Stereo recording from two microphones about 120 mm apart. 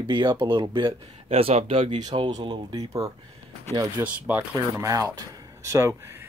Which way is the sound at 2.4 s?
30° right (ahead or behind).